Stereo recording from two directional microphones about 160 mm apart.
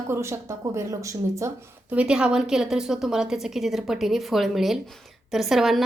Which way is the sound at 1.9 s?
5° right (ahead or behind).